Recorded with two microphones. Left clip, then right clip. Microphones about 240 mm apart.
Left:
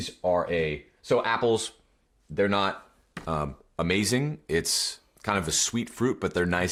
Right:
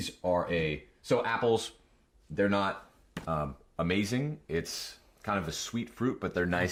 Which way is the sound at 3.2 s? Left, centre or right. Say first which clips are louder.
Left 3 dB; left.